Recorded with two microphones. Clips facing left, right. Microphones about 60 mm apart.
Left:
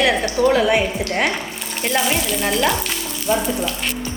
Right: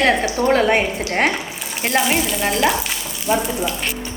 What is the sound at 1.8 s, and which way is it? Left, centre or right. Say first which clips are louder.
Speech: right 2 dB; right.